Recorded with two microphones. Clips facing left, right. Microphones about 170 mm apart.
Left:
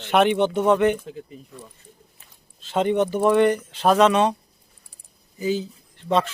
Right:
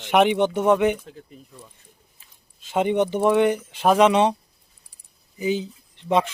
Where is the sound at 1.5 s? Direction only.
70° left (ahead or behind).